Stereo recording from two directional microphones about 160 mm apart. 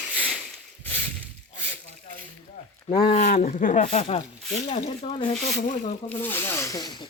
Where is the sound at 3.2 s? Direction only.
50° left (ahead or behind).